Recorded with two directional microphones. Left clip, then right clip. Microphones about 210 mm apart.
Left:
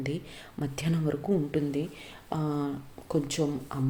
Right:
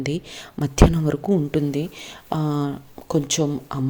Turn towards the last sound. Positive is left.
turn(degrees=-40)  # may be behind; listen again after turning